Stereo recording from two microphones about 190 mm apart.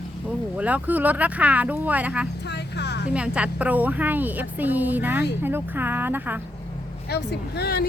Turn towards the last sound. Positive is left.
turn(degrees=55)  # may be behind; listen again after turning